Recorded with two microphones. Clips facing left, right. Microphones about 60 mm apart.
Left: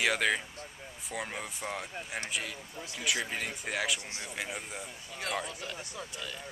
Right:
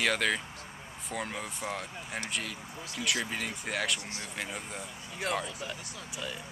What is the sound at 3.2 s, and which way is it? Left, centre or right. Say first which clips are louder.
Speech: right 1 dB; centre.